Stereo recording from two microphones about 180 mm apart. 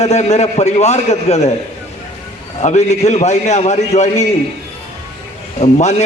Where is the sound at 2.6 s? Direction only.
40° left (ahead or behind).